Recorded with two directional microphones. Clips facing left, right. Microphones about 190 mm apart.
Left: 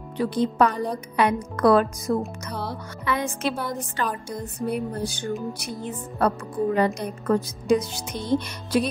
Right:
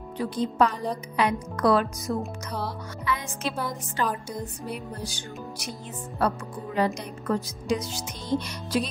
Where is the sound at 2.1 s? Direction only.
50° left (ahead or behind).